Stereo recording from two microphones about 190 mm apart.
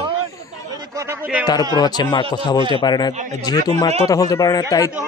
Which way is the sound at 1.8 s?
20° left (ahead or behind).